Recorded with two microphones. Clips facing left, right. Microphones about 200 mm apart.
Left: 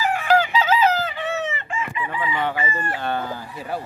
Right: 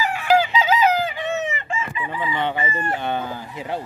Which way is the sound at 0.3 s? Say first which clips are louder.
Right 2 dB; 10° right (ahead or behind).